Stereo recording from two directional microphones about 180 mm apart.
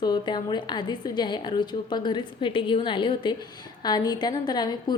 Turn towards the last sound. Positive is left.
turn(degrees=25)  # may be behind; listen again after turning